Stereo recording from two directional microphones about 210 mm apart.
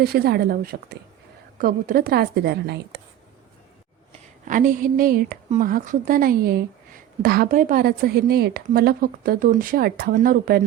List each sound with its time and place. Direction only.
0.0 s a woman's voice: 50° right (ahead or behind)
4.4 s a woman's voice: 40° right (ahead or behind)